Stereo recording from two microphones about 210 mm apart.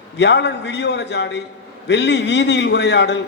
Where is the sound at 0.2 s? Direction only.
55° left (ahead or behind).